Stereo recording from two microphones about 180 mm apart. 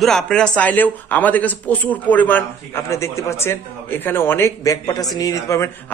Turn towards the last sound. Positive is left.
turn(degrees=15)  # may be behind; listen again after turning